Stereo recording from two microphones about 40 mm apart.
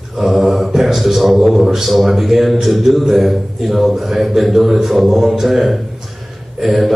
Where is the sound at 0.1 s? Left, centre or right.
Centre.